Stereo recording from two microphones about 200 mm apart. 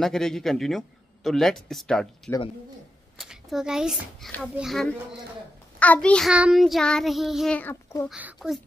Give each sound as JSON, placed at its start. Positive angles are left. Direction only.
{"t": 0.0, "sound": "child singing", "side_deg": 0}
{"t": 8.1, "sound": "child singing", "side_deg": -5}